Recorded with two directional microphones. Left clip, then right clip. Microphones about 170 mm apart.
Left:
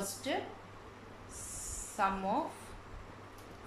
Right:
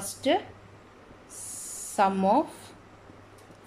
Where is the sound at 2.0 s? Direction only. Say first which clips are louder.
Right 9 dB; 55° right (ahead or behind).